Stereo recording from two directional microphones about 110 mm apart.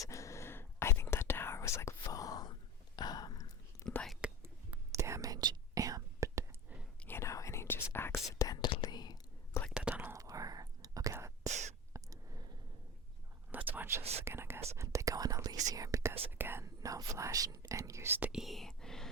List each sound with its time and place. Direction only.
0.1 s whispering: 30° left (ahead or behind)
3.8 s whispering: 5° left (ahead or behind)
4.4 s whispering: 25° right (ahead or behind)
7.0 s whispering: 20° left (ahead or behind); by 9.1 s 40° left (ahead or behind)
9.5 s whispering: 25° left (ahead or behind)
9.9 s whispering: 20° right (ahead or behind)
11.9 s a sound: 30° right (ahead or behind)
13.5 s a sound: 15° right (ahead or behind)
14.3 s whispering: 20° right (ahead or behind)
16.6 s whispering: 30° right (ahead or behind)
18.3 s whispering: centre (ahead or behind)